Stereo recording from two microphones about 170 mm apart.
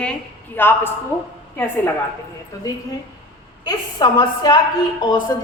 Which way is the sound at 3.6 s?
25° left (ahead or behind).